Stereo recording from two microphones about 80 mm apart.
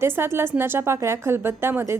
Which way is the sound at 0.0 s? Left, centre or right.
Right.